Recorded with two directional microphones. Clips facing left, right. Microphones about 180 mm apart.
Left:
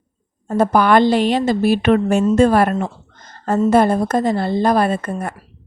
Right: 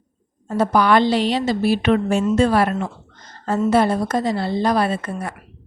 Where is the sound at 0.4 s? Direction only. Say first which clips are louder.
Left 2 dB; 50° left (ahead or behind).